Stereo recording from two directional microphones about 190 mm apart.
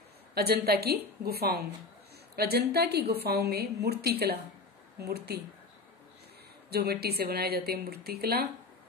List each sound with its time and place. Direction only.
0.3 s a woman's voice: 55° right (ahead or behind)
6.7 s a woman's voice: 55° right (ahead or behind)